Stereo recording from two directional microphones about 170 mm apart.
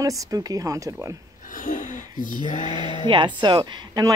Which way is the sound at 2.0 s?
25° right (ahead or behind).